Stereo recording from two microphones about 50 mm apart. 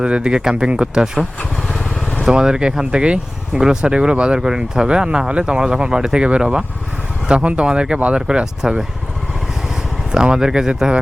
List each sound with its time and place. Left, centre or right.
0.0 s speech: centre
10.1 s speech: centre